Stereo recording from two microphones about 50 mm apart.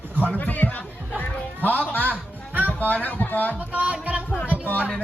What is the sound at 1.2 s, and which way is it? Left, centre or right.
Music, left.